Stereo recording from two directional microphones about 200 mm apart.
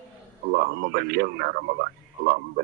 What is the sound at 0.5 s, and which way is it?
Speech, 50° right (ahead or behind).